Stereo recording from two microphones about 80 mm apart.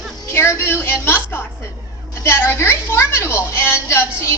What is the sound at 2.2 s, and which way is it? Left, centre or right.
A woman's voice, left.